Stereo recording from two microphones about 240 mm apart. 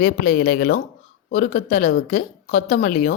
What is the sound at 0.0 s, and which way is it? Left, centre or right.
Speech, left.